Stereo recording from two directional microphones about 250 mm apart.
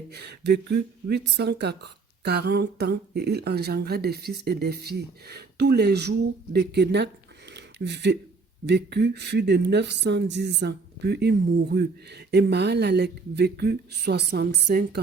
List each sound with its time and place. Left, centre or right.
0.1 s speech: right
7.5 s a sound: right
8.6 s speech: right